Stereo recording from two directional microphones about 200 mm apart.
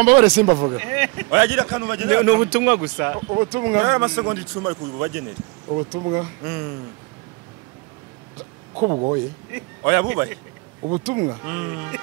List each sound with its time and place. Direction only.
0.0 s a man's voice: 10° right (ahead or behind)
8.7 s speech: 25° right (ahead or behind)
9.5 s a man's voice: 10° right (ahead or behind)
10.8 s speech: 25° right (ahead or behind)
11.4 s a man's voice: 10° right (ahead or behind)